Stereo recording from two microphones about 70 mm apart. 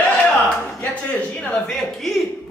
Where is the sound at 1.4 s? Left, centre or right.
Centre.